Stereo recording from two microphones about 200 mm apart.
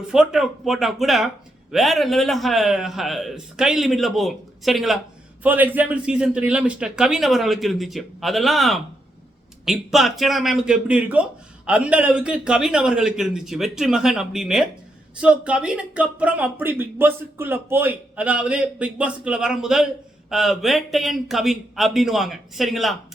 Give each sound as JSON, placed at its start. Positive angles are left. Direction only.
{"t": 0.1, "sound": "a man's voice", "side_deg": -5}